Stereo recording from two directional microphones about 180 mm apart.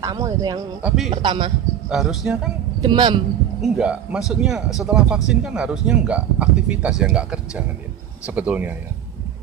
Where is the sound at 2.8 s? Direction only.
25° right (ahead or behind).